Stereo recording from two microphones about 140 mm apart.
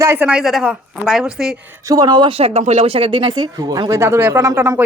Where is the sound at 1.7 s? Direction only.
25° right (ahead or behind).